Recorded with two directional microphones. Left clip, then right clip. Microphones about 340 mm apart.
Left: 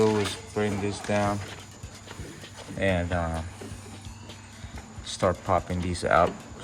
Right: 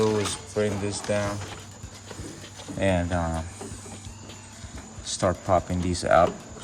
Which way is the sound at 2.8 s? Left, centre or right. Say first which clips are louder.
Right 1 dB; centre.